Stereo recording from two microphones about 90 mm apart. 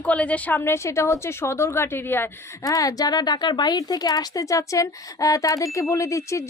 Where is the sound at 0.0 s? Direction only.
15° left (ahead or behind).